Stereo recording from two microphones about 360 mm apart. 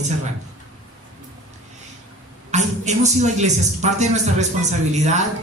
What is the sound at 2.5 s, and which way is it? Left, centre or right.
A man's voice, centre.